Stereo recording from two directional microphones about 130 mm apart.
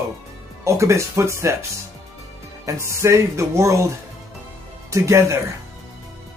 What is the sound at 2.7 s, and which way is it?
Speech, 20° right (ahead or behind).